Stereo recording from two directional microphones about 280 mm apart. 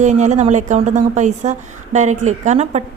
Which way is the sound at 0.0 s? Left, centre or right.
Right.